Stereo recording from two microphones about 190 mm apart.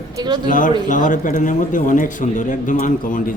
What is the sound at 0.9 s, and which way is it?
Speech, 40° left (ahead or behind).